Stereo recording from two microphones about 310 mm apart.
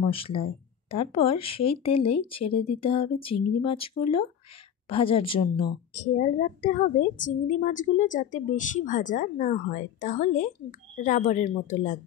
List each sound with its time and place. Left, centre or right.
0.0 s a woman's voice: centre